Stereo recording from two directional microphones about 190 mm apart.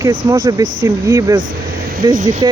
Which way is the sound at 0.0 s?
20° right (ahead or behind).